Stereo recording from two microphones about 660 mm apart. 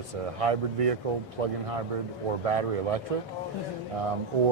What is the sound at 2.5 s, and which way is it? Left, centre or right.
Speech, right.